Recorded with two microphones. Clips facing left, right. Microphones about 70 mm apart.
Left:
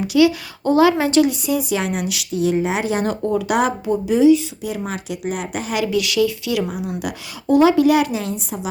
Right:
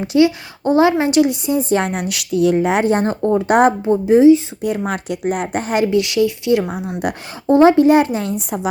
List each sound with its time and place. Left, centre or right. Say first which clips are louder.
0.0 s speech: right 1 dB; right
1.7 s speech: right 4 dB; right
4.9 s speech: right 5 dB; right
8.1 s a woman's voice: right 3 dB; right